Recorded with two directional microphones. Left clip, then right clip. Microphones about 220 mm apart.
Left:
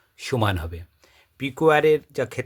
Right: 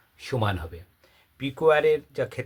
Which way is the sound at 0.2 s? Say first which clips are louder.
Left 4 dB; 50° left (ahead or behind).